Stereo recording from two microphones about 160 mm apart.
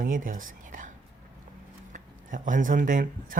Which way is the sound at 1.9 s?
55° right (ahead or behind).